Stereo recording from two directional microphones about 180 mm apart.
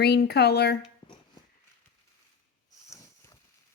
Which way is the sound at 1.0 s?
30° left (ahead or behind).